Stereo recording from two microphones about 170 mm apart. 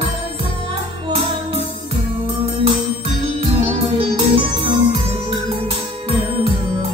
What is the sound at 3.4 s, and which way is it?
Music, 35° right (ahead or behind).